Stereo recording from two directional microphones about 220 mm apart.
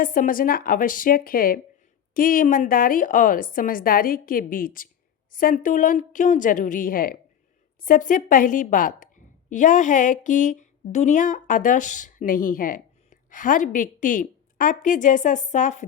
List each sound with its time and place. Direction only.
0.0 s a woman's voice: 40° left (ahead or behind)